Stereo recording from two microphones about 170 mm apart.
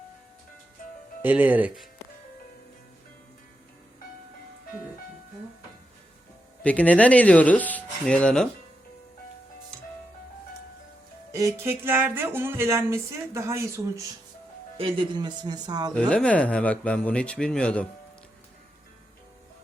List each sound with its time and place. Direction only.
1.2 s speech: 10° right (ahead or behind)
6.6 s speech: 10° left (ahead or behind)
11.3 s speech: 20° right (ahead or behind)
14.8 s speech: 30° right (ahead or behind)
16.0 s speech: 5° left (ahead or behind)